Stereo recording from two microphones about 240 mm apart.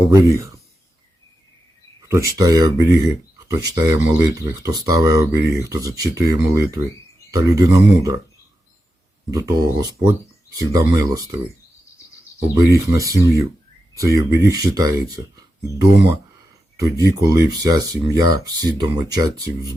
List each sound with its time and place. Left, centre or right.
0.0 s speech: centre
2.0 s speech: centre
9.3 s speech: centre
12.5 s speech: centre
16.7 s speech: centre